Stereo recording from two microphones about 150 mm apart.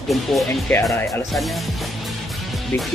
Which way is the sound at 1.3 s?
Centre (ahead or behind).